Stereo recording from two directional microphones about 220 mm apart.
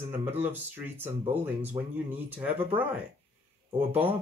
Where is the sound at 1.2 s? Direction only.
30° right (ahead or behind).